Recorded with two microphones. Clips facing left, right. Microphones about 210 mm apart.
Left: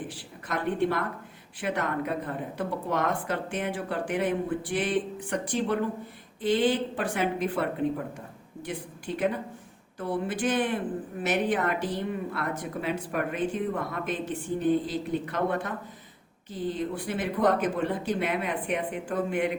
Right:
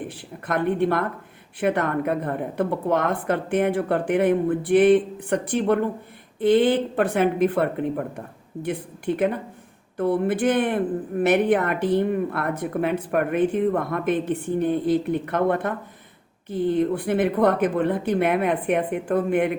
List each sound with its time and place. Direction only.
0.1 s a woman's voice: 55° right (ahead or behind)